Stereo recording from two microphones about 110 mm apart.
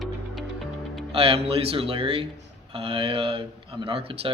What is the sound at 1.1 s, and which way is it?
Speech, 60° right (ahead or behind).